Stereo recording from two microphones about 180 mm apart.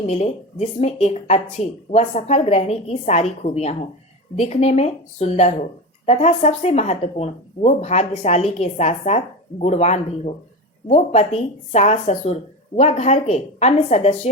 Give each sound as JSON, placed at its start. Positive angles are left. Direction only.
{"t": 0.1, "sound": "speech", "side_deg": 40}